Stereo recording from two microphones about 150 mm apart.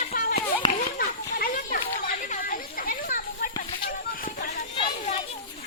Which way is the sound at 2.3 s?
70° left (ahead or behind).